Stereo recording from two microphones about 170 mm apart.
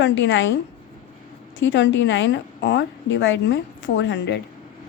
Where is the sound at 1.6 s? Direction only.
90° left.